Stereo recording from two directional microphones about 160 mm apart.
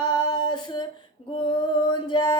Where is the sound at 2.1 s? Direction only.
25° left (ahead or behind).